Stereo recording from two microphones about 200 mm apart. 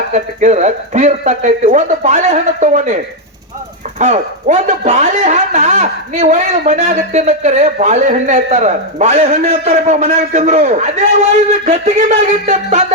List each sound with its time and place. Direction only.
0.1 s speech: 35° right (ahead or behind)